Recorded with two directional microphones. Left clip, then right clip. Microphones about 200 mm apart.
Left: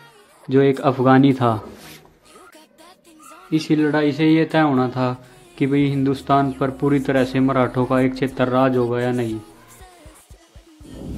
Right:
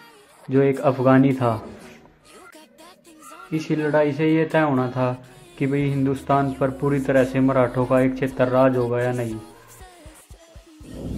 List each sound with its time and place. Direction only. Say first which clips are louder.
0.5 s speech: left 2 dB; 40° left (ahead or behind)
3.5 s speech: left 2 dB; 40° left (ahead or behind)